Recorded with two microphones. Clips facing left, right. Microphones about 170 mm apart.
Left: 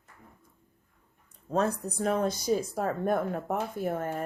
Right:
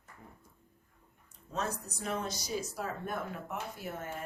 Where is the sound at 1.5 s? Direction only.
55° left (ahead or behind).